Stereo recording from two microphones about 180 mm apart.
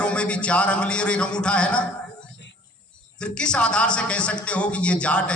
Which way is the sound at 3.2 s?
5° left (ahead or behind).